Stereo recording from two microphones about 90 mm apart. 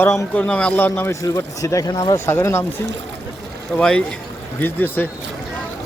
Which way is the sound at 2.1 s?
25° left (ahead or behind).